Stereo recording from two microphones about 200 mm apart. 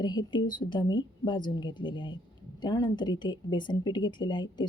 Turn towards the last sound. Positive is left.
turn(degrees=20)  # may be behind; listen again after turning